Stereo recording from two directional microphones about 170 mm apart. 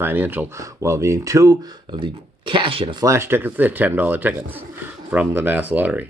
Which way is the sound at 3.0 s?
15° right (ahead or behind).